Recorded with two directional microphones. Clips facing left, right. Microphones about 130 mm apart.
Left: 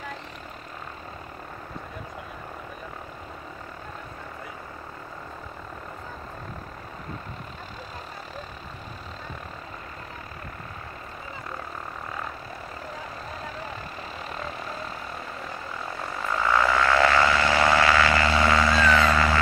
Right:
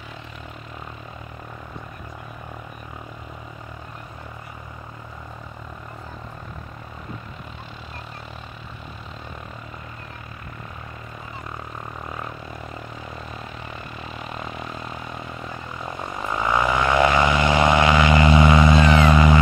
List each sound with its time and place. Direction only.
14.5 s vehicle: 35° left (ahead or behind)
15.8 s vehicle: 20° right (ahead or behind)